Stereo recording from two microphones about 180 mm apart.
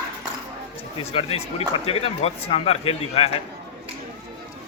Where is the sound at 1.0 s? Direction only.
35° left (ahead or behind).